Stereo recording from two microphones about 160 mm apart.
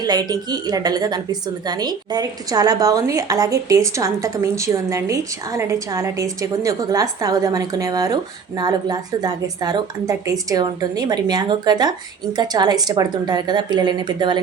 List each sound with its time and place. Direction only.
0.0 s a woman's voice: 25° right (ahead or behind)